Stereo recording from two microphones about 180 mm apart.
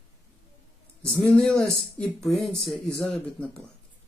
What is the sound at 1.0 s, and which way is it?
Speech, 5° left (ahead or behind).